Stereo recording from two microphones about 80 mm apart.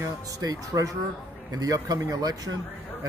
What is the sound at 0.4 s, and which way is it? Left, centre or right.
A man's voice, right.